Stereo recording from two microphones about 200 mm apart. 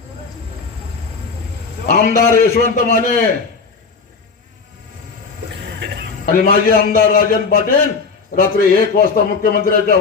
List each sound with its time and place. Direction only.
1.9 s a man's voice: 50° left (ahead or behind)
6.2 s a man's voice: 45° left (ahead or behind)